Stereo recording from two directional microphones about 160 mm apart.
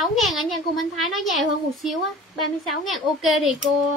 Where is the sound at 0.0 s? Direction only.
Centre (ahead or behind).